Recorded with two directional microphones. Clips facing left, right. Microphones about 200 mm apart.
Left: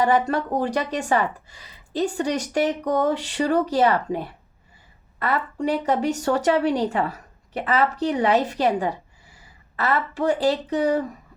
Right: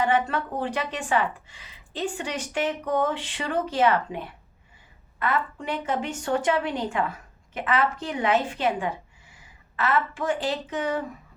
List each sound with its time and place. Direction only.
0.0 s a woman's voice: 40° left (ahead or behind)